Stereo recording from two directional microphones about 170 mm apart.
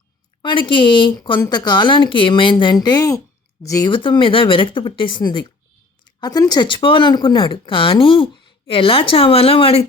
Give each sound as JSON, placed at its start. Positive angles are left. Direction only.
{"t": 0.4, "sound": "speech", "side_deg": 30}